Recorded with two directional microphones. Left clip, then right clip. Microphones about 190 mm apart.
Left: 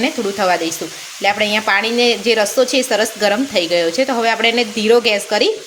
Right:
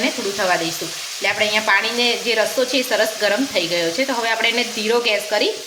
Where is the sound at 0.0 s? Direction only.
50° left (ahead or behind).